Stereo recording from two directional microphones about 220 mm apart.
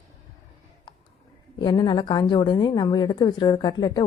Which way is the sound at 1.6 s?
20° left (ahead or behind).